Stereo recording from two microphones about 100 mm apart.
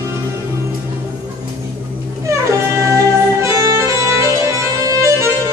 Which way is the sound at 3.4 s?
30° right (ahead or behind).